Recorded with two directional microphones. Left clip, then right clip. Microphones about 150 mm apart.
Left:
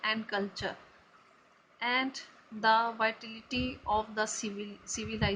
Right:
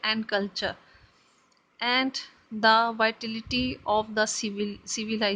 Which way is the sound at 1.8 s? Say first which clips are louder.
Right 5 dB; 60° right (ahead or behind).